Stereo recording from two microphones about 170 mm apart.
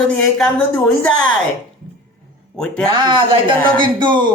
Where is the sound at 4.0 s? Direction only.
25° right (ahead or behind).